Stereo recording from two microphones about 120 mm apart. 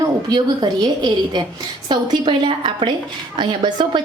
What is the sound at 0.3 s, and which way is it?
A woman's voice, 40° right (ahead or behind).